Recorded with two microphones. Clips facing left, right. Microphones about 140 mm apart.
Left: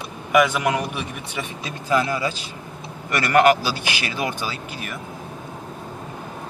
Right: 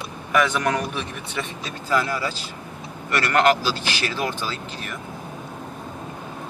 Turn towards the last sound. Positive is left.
turn(degrees=15)  # may be behind; listen again after turning